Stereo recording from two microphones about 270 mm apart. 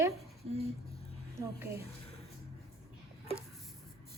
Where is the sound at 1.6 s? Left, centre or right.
Centre.